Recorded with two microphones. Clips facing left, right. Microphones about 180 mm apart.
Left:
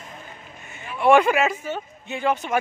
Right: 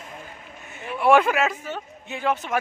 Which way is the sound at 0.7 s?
Centre (ahead or behind).